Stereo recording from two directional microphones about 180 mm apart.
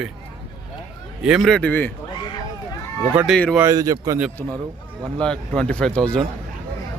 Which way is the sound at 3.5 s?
20° right (ahead or behind).